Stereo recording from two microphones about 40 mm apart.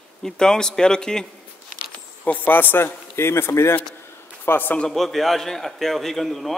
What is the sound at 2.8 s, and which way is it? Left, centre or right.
Speech, left.